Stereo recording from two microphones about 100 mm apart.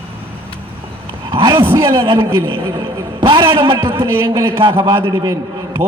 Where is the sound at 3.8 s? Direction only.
25° right (ahead or behind).